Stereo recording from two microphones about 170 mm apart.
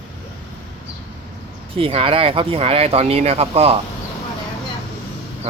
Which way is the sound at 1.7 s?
35° right (ahead or behind).